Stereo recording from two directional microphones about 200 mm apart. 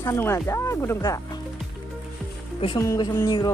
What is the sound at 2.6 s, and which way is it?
Speech, 20° left (ahead or behind).